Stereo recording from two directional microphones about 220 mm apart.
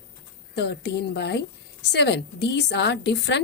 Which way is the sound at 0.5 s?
50° left (ahead or behind).